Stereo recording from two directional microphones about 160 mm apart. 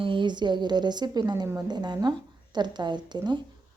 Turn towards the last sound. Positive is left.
turn(degrees=-30)  # may be behind; listen again after turning